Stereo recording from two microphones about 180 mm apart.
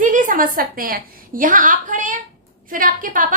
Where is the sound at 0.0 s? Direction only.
45° right (ahead or behind).